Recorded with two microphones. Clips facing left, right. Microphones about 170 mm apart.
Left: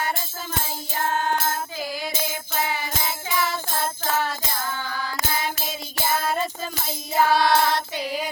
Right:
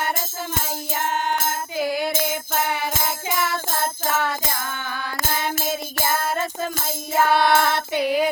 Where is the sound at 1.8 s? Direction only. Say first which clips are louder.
Right 10 dB; 60° right (ahead or behind).